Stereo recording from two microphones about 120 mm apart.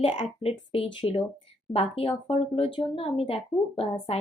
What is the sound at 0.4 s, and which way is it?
Speech, 50° left (ahead or behind).